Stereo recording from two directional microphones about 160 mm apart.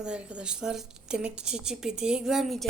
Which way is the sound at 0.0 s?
5° right (ahead or behind).